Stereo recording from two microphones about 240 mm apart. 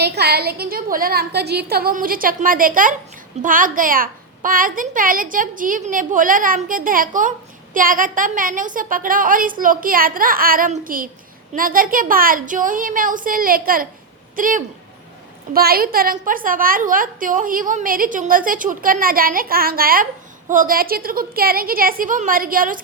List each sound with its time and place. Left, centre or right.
0.0 s a woman's voice: right